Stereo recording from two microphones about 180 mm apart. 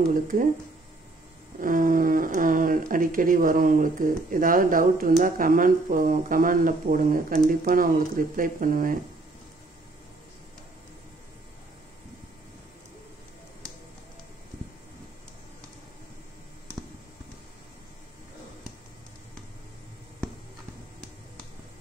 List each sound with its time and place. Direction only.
0.1 s speech: 50° right (ahead or behind)
1.6 s speech: 50° right (ahead or behind)